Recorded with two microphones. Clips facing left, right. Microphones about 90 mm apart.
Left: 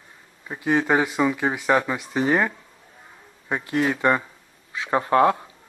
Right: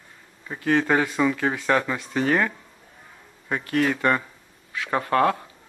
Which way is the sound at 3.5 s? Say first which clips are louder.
Even; 15° left (ahead or behind).